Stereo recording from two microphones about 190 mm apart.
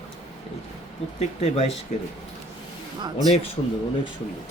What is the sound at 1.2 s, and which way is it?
Speech, 35° left (ahead or behind).